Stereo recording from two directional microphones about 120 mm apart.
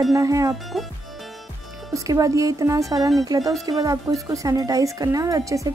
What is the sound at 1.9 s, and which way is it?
Speech, 30° right (ahead or behind).